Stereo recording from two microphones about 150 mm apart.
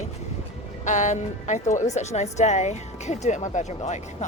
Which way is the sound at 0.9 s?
55° left (ahead or behind).